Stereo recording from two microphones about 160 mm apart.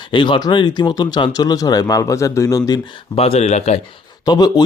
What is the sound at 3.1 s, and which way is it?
Speech, 40° left (ahead or behind).